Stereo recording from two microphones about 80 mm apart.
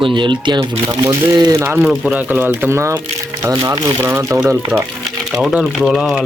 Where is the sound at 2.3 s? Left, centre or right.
Right.